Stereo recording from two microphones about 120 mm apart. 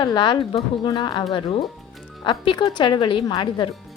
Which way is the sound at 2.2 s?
45° left (ahead or behind).